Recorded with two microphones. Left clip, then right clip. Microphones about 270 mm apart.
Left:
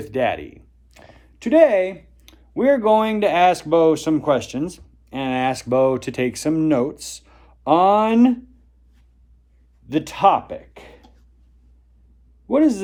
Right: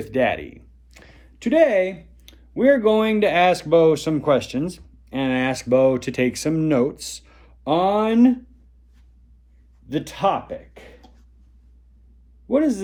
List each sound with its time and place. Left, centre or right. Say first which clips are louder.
0.0 s speech: even; centre
9.9 s speech: left 5 dB; centre
12.5 s a man's voice: left 3 dB; centre